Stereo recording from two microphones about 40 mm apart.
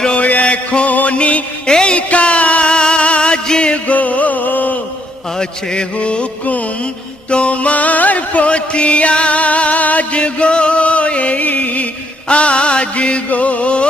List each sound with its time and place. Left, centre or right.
0.2 s music: left
1.7 s mantra: left
2.0 s music: left
3.8 s music: left
5.4 s mantra: left
7.2 s music: left
12.3 s music: left